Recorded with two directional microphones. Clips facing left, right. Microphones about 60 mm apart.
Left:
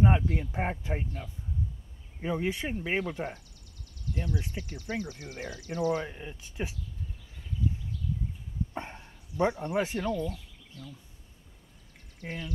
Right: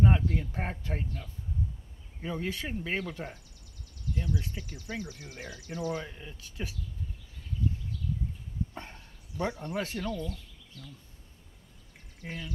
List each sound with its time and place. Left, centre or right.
0.0 s speech: centre
4.6 s speech: centre
5.9 s speech: left
8.7 s speech: left
12.2 s speech: centre